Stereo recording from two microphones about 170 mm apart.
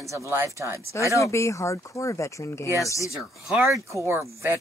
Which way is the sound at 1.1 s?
15° left (ahead or behind).